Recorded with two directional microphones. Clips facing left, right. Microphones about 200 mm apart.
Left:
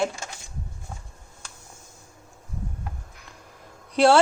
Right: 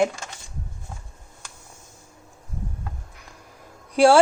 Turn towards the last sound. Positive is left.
turn(degrees=-10)  # may be behind; listen again after turning